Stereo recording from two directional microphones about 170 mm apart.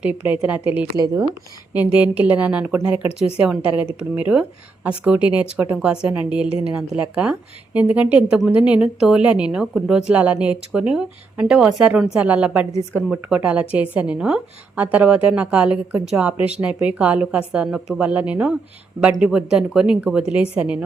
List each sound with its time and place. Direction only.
0.0 s speech: 10° right (ahead or behind)
0.9 s speech: 25° right (ahead or behind)
1.7 s a woman's voice: 10° right (ahead or behind)